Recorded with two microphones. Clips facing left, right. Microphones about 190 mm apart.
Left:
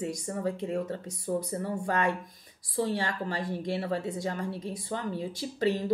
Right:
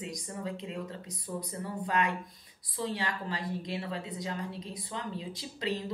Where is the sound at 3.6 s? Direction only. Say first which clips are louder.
Left 6 dB; 45° left (ahead or behind).